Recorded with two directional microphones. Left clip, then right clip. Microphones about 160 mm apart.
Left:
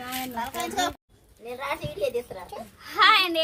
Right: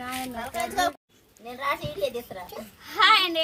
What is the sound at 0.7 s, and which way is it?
Speech, 60° right (ahead or behind).